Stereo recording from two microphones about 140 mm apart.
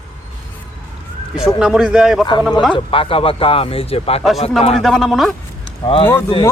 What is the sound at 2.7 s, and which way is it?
Speech, 40° left (ahead or behind).